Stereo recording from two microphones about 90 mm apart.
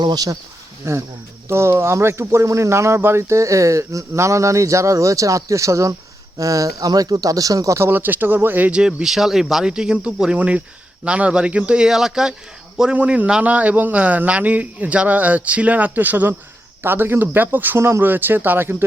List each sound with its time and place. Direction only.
0.0 s speech: 45° right (ahead or behind)
0.8 s a man's voice: 30° right (ahead or behind)